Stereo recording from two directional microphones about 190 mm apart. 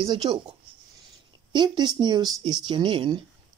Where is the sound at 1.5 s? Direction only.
25° right (ahead or behind).